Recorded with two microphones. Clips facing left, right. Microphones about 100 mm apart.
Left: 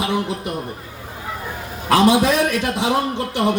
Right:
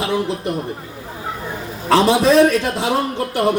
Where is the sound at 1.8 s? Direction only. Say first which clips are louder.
Right 1 dB; 10° left (ahead or behind).